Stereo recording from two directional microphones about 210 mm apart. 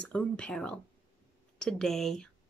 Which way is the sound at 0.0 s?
5° left (ahead or behind).